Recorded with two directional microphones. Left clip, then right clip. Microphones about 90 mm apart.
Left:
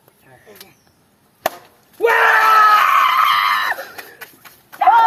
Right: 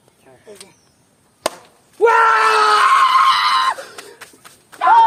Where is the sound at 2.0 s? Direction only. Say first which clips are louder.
Right 1 dB; 15° right (ahead or behind).